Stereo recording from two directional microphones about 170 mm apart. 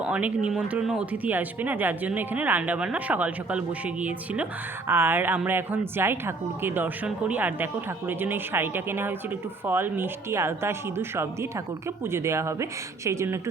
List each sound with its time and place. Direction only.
0.0 s speech: 10° right (ahead or behind)